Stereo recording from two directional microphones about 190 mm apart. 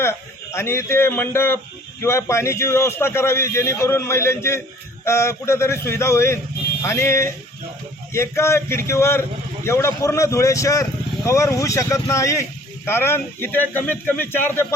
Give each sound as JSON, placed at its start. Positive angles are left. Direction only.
{"t": 0.0, "sound": "speech", "side_deg": 15}